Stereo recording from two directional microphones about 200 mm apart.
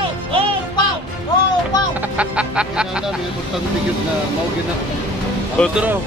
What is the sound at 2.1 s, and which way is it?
Speech, 5° right (ahead or behind).